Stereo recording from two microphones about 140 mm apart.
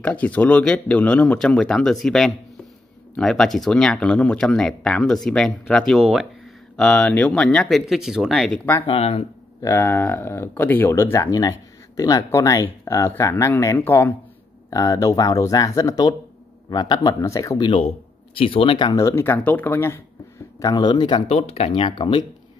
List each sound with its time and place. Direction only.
0.0 s speech: 10° left (ahead or behind)
8.8 s speech: 40° left (ahead or behind)
9.6 s speech: 20° left (ahead or behind)
20.6 s speech: 30° left (ahead or behind)
21.3 s speech: 45° left (ahead or behind)